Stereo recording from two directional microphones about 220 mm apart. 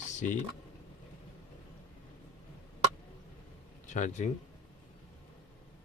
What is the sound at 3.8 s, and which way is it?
Speech, 35° left (ahead or behind).